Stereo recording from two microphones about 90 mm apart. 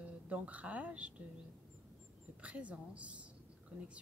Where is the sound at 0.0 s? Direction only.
15° right (ahead or behind).